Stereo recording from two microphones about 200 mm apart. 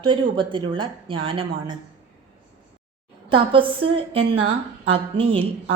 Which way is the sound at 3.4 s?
25° right (ahead or behind).